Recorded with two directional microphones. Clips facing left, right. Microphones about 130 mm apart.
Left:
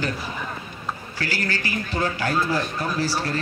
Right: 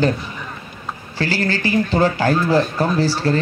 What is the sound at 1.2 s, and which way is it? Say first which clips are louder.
Speech: right 8 dB; 30° right (ahead or behind).